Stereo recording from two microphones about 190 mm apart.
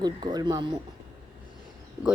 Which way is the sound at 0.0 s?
20° right (ahead or behind).